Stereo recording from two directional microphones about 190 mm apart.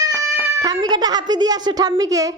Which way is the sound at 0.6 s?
20° right (ahead or behind).